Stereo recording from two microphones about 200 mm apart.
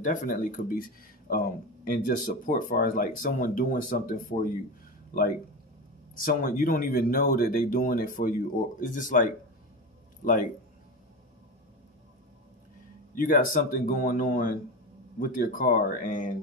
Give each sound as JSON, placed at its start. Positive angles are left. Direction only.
{"t": 0.0, "sound": "speech", "side_deg": 40}
{"t": 6.1, "sound": "speech", "side_deg": 45}
{"t": 13.1, "sound": "speech", "side_deg": 40}